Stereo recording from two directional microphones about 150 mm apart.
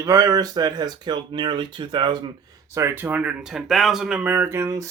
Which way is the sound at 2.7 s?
15° right (ahead or behind).